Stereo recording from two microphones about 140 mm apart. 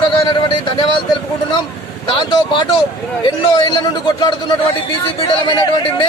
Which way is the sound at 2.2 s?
35° left (ahead or behind).